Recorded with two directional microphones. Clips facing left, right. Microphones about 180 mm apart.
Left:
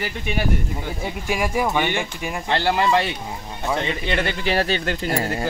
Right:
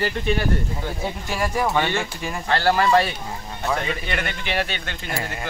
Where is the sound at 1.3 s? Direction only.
10° left (ahead or behind).